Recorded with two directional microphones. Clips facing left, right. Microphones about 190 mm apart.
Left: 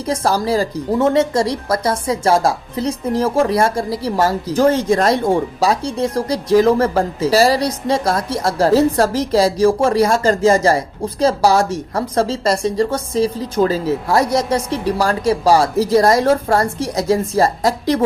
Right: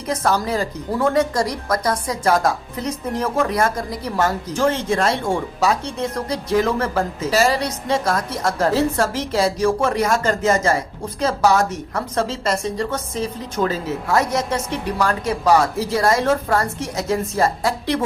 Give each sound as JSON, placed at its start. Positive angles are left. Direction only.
{"t": 0.1, "sound": "a woman's voice", "side_deg": 30}